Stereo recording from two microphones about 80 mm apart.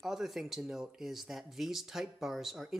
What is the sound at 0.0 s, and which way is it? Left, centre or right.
Speech, centre.